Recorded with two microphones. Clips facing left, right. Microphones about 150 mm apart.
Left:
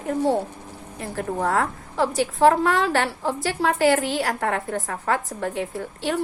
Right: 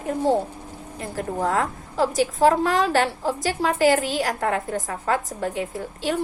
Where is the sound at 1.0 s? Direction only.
40° right (ahead or behind).